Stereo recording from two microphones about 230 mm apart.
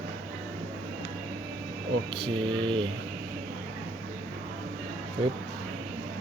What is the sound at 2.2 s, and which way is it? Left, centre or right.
Speech, right.